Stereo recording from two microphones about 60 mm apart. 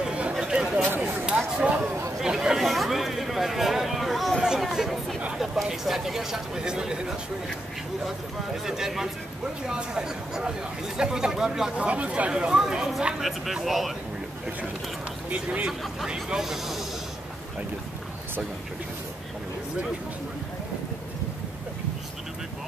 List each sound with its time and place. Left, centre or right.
0.0 s a sound: centre
2.2 s speech: centre
8.6 s speech: centre
11.7 s speech: right; by 13.9 s centre
15.2 s speech: centre